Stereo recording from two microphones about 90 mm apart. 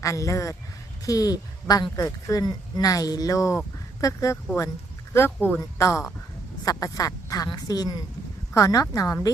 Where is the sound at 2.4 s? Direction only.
45° left (ahead or behind).